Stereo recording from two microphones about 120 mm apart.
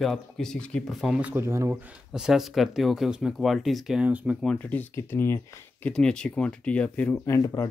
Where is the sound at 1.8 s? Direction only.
5° right (ahead or behind).